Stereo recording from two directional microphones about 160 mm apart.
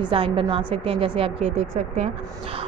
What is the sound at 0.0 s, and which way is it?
A woman's voice, 35° right (ahead or behind).